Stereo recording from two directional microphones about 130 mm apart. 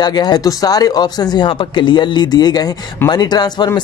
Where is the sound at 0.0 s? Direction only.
30° left (ahead or behind).